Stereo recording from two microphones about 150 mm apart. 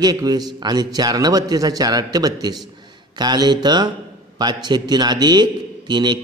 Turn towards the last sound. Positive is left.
turn(degrees=-30)  # may be behind; listen again after turning